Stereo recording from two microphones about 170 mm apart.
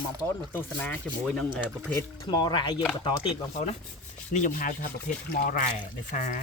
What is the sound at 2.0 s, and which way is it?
Speech, 25° left (ahead or behind).